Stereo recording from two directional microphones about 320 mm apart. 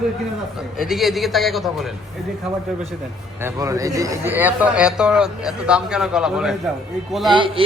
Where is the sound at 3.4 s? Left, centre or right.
Centre.